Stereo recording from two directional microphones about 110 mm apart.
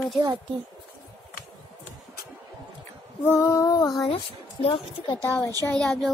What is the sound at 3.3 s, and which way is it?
Female singing, 25° left (ahead or behind).